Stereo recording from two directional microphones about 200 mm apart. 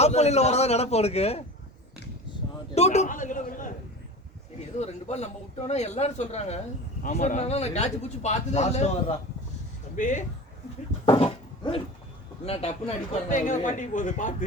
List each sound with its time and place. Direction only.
0.0 s speech: 35° left (ahead or behind)
2.7 s speech: 35° left (ahead or behind)
4.8 s speech: 35° left (ahead or behind)
11.0 s a sound: 25° left (ahead or behind)
13.2 s speech: 40° left (ahead or behind)